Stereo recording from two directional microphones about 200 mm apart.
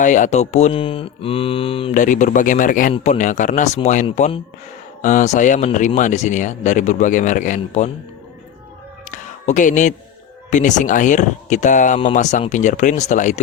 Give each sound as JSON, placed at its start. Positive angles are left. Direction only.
{"t": 0.0, "sound": "speech", "side_deg": 40}
{"t": 1.9, "sound": "speech", "side_deg": 40}
{"t": 9.0, "sound": "a sound", "side_deg": 40}
{"t": 10.5, "sound": "speech", "side_deg": 40}